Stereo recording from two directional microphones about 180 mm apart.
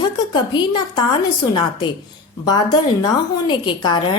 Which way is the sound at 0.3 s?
25° left (ahead or behind).